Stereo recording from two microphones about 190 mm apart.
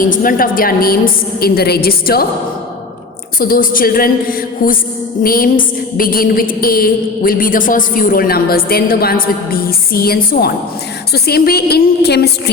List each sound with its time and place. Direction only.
0.0 s a woman's voice: 45° left (ahead or behind)
3.3 s a woman's voice: 50° left (ahead or behind)